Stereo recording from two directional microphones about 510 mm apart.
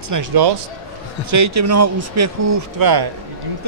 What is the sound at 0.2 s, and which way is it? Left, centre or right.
Speech, right.